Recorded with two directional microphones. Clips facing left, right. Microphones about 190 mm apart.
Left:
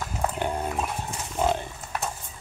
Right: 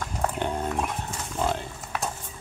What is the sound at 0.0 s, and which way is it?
Horse, 5° left (ahead or behind).